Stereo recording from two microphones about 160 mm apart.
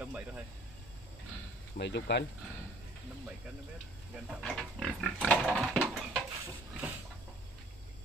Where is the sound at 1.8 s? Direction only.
90° left.